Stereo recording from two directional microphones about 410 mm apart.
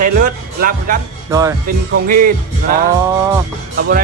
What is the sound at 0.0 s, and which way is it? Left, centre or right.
Music, centre.